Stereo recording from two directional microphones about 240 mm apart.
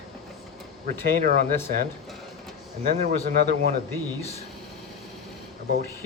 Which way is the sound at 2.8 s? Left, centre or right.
Right.